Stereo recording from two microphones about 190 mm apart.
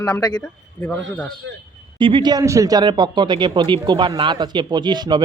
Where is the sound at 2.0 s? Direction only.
25° right (ahead or behind).